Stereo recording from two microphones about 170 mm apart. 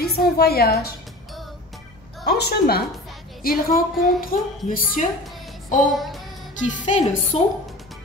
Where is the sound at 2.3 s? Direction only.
70° left (ahead or behind); by 5.1 s 55° left (ahead or behind).